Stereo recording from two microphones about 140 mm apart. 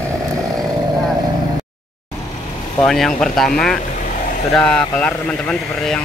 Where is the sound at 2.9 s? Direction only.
5° left (ahead or behind).